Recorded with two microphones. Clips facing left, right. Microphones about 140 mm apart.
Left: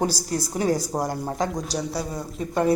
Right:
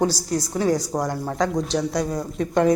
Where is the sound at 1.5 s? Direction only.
5° left (ahead or behind).